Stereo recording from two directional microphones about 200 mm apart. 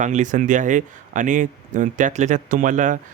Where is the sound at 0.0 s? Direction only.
40° right (ahead or behind).